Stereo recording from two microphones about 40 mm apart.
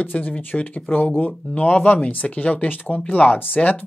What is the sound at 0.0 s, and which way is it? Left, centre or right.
A man's voice, left.